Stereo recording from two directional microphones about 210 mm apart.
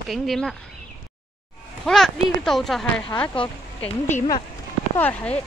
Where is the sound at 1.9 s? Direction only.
Centre (ahead or behind).